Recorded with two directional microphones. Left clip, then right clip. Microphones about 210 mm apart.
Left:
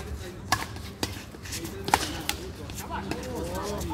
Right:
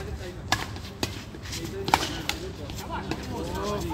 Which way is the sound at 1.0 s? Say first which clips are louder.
Right 1 dB; 5° right (ahead or behind).